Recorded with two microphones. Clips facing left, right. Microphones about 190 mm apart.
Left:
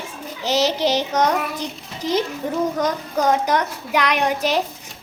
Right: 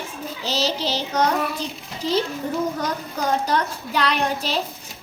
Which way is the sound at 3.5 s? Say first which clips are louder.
Left 3 dB; 15° left (ahead or behind).